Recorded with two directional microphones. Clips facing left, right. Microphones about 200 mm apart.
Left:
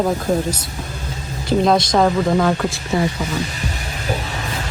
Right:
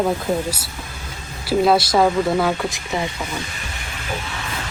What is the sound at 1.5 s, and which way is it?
Speech, 5° right (ahead or behind).